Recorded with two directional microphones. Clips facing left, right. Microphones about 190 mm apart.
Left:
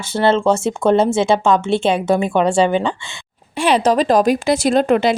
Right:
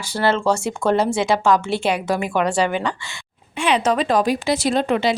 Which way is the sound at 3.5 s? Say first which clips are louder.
Left 4 dB; 40° left (ahead or behind).